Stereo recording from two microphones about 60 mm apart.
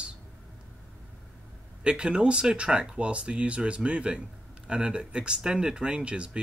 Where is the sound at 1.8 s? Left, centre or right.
Centre.